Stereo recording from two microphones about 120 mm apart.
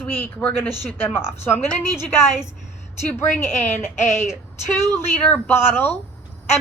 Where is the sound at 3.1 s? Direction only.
15° left (ahead or behind).